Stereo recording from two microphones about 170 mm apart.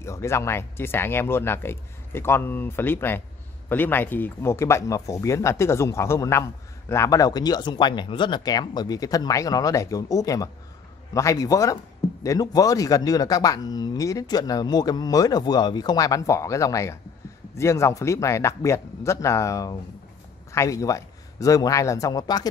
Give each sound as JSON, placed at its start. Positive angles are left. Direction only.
{"t": 0.0, "sound": "speech", "side_deg": 15}